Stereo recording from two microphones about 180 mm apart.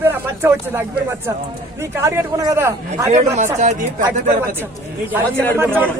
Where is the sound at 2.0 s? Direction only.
15° right (ahead or behind).